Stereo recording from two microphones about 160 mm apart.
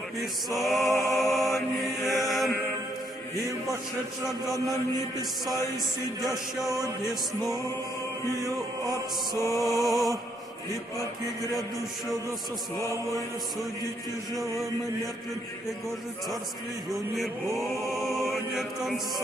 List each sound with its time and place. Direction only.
0.2 s chant: centre (ahead or behind)
0.8 s music: 15° left (ahead or behind)
1.1 s chant: centre (ahead or behind)
8.5 s chant: 25° right (ahead or behind)
9.6 s chant: centre (ahead or behind)
16.9 s chant: centre (ahead or behind)